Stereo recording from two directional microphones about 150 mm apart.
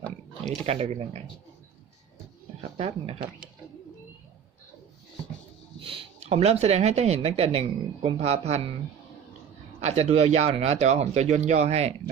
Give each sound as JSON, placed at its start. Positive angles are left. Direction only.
{"t": 0.6, "sound": "speech", "side_deg": -40}
{"t": 2.7, "sound": "speech", "side_deg": -40}
{"t": 5.8, "sound": "speech", "side_deg": -35}
{"t": 9.8, "sound": "speech", "side_deg": -45}